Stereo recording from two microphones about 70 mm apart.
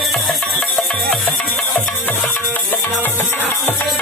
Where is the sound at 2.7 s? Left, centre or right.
Left.